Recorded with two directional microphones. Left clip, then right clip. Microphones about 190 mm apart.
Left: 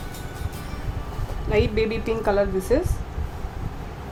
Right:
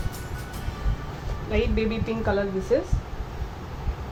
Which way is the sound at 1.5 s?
55° left (ahead or behind).